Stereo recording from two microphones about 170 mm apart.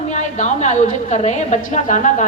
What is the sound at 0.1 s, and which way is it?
A woman's voice, 45° left (ahead or behind).